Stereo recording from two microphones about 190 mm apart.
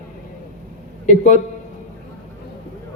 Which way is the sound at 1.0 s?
40° left (ahead or behind).